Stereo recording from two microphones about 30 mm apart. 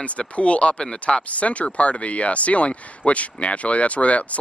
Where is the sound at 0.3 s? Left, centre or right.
Left.